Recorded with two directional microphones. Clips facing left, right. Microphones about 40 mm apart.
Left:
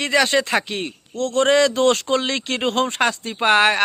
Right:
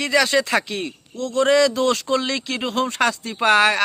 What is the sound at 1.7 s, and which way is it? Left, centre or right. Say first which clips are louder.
Speech: left 2 dB; left.